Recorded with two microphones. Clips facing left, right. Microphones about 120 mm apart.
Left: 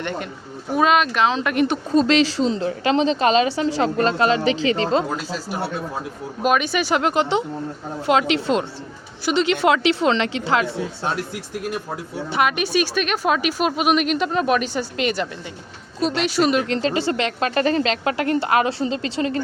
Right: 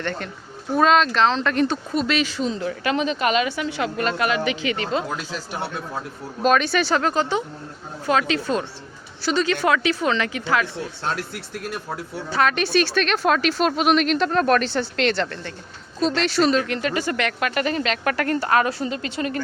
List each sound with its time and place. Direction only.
0.0 s a woman's voice: 15° left (ahead or behind)
1.9 s a woman's voice: 30° left (ahead or behind)
5.5 s a woman's voice: 5° left (ahead or behind); by 10.7 s 25° left (ahead or behind)
11.0 s a woman's voice: 10° left (ahead or behind)
16.6 s speech: 25° left (ahead or behind)